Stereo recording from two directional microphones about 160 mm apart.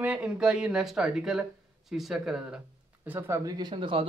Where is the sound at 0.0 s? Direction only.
10° right (ahead or behind).